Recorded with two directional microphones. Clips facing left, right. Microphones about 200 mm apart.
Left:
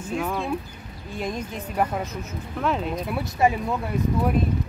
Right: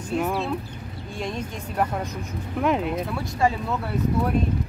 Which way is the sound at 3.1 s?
15° left (ahead or behind).